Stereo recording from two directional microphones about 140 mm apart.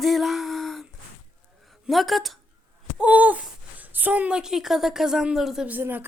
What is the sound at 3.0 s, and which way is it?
Speech, 10° right (ahead or behind).